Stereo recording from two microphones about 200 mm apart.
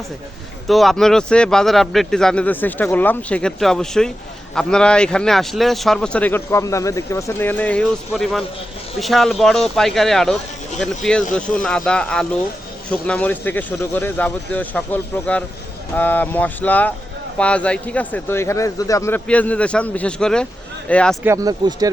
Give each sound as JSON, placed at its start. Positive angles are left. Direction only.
{"t": 0.7, "sound": "a man's voice", "side_deg": 0}
{"t": 21.2, "sound": "speech", "side_deg": -15}